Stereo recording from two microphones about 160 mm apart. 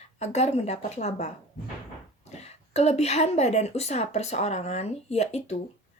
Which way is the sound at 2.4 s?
40° left (ahead or behind).